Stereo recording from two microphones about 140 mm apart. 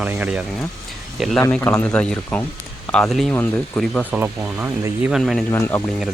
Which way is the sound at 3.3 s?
15° left (ahead or behind).